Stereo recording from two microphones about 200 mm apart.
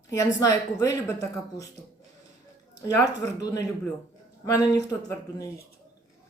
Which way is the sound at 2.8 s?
20° left (ahead or behind).